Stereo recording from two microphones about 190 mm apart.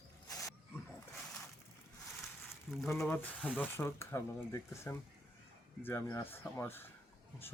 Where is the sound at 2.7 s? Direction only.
5° left (ahead or behind).